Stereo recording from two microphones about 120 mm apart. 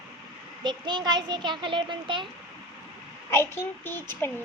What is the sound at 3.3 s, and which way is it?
Speech, 20° left (ahead or behind).